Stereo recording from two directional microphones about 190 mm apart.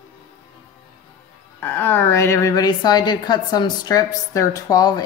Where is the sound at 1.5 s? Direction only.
10° left (ahead or behind).